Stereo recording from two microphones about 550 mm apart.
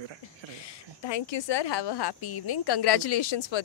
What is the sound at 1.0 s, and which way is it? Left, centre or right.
Speech, left.